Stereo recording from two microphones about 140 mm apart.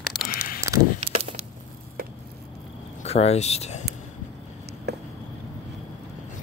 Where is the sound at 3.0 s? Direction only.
50° left (ahead or behind).